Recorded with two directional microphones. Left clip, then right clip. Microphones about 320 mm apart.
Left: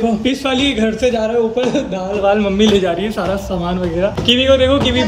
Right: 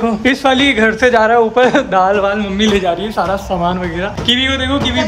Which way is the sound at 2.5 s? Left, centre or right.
Centre.